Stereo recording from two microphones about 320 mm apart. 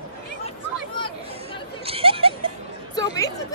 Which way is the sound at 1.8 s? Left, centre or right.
Centre.